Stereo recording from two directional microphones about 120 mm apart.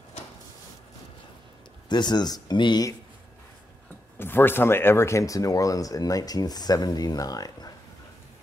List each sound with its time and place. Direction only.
1.9 s speech: 35° left (ahead or behind)
4.2 s speech: 20° left (ahead or behind)